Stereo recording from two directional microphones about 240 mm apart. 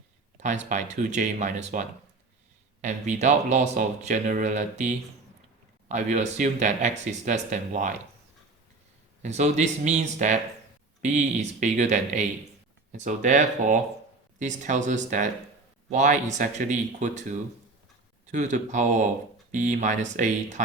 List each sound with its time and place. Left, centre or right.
0.3 s speech: right
2.8 s speech: right
5.9 s speech: right
9.2 s speech: right